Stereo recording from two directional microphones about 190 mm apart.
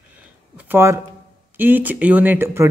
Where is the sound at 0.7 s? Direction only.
15° right (ahead or behind).